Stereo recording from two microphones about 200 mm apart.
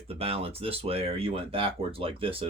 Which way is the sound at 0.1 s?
30° right (ahead or behind).